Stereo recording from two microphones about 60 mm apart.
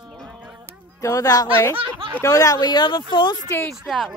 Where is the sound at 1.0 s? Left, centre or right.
Left.